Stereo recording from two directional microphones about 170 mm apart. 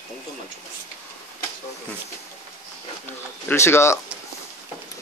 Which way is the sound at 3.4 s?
15° left (ahead or behind).